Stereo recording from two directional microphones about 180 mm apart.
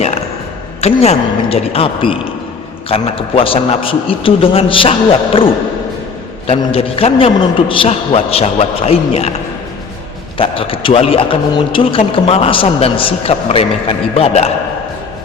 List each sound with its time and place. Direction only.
0.8 s a man's voice: 35° left (ahead or behind)
10.3 s a man's voice: 30° left (ahead or behind)